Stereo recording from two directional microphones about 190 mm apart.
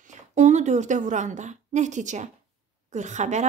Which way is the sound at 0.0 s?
40° right (ahead or behind).